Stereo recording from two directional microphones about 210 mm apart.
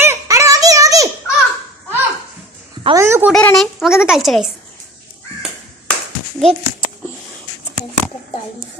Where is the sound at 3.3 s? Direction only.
5° left (ahead or behind).